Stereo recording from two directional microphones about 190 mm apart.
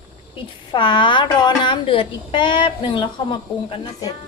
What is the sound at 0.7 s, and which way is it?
A woman's voice, 25° left (ahead or behind).